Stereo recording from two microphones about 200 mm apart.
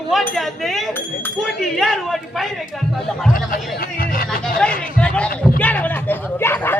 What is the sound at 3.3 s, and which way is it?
Speech, 45° left (ahead or behind).